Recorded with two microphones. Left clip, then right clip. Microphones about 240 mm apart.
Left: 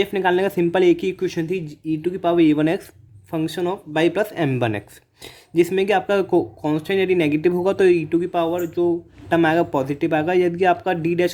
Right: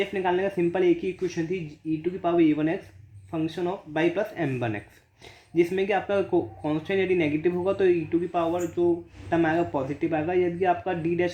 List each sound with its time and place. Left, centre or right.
0.0 s speech: left